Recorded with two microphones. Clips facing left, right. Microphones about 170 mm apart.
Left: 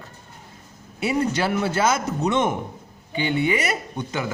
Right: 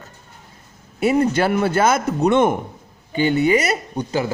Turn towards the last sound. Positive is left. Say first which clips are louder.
# right 6 dB
turn(degrees=-35)  # may be behind; listen again after turning